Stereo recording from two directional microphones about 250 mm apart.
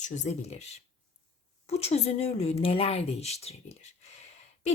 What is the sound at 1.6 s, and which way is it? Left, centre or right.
A woman's voice, left.